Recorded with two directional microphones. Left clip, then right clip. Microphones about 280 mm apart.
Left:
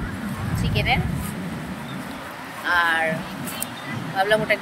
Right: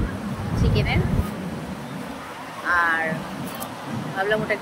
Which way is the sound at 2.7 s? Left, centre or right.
Centre.